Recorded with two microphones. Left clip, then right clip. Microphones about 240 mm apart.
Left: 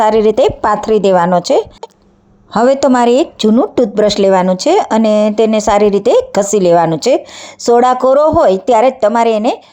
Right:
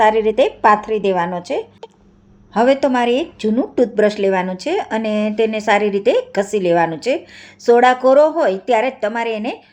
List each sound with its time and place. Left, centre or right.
0.0 s speech: left